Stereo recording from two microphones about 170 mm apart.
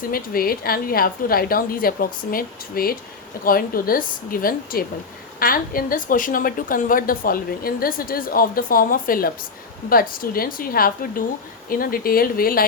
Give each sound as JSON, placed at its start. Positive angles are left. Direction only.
{"t": 0.1, "sound": "a woman's voice", "side_deg": 60}